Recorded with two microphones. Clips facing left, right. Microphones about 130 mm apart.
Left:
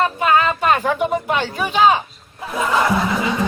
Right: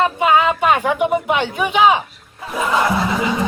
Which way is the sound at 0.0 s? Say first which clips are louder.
Right 2 dB; 15° right (ahead or behind).